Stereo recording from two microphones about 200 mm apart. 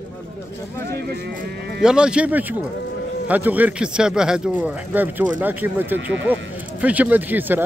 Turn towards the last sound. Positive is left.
turn(degrees=-10)  # may be behind; listen again after turning